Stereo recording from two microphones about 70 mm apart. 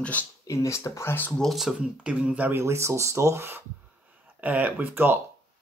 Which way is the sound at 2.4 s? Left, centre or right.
Right.